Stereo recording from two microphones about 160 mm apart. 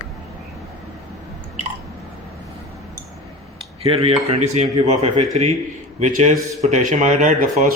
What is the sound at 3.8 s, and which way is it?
Speech, 35° right (ahead or behind).